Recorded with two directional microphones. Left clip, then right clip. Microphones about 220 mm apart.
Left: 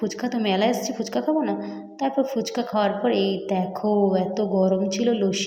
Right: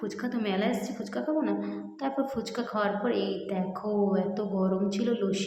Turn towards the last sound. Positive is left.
turn(degrees=15)  # may be behind; listen again after turning